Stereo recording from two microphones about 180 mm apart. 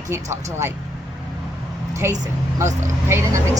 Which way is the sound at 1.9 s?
20° right (ahead or behind).